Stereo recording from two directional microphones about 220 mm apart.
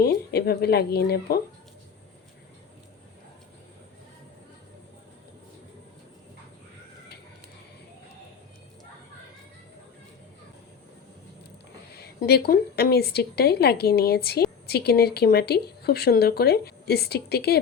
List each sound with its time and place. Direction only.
0.0 s speech: 45° left (ahead or behind)
11.9 s a woman's voice: 45° left (ahead or behind)